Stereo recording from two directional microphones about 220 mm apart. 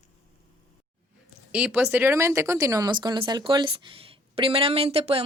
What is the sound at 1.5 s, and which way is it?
Speech, 5° right (ahead or behind).